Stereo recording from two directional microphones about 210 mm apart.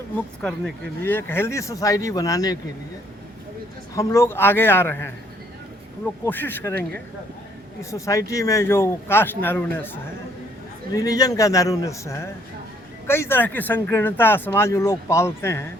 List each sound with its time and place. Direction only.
0.4 s speech: 5° left (ahead or behind)
3.9 s speech: 15° left (ahead or behind)
6.2 s speech: 10° left (ahead or behind)